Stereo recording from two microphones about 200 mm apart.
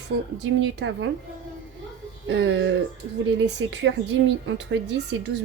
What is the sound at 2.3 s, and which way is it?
Speech, 65° right (ahead or behind).